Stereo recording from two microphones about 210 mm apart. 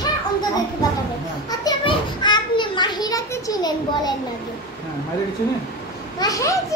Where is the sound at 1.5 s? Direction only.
20° left (ahead or behind).